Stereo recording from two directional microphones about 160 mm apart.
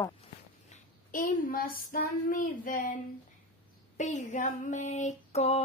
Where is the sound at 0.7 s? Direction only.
55° left (ahead or behind).